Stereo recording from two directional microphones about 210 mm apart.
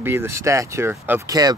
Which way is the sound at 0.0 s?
10° right (ahead or behind).